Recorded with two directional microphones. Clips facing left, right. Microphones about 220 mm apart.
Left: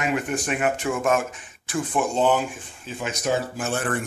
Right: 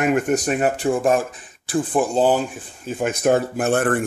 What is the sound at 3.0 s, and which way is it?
Speech, 55° right (ahead or behind).